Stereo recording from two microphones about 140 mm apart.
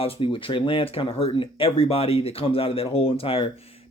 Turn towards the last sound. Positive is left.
turn(degrees=40)  # may be behind; listen again after turning